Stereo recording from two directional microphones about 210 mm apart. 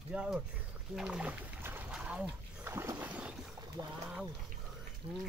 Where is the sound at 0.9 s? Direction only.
5° right (ahead or behind).